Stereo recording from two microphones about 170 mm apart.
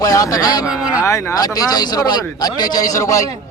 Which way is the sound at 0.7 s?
5° right (ahead or behind).